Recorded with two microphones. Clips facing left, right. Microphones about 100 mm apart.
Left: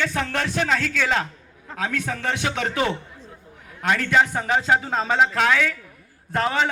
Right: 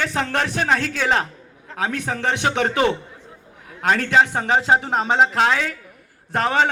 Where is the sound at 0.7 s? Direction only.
35° right (ahead or behind).